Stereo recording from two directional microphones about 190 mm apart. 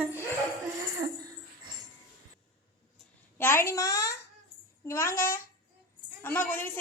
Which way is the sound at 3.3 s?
10° left (ahead or behind).